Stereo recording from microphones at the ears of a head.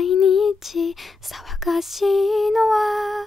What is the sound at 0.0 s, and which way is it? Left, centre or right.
Female singing, left.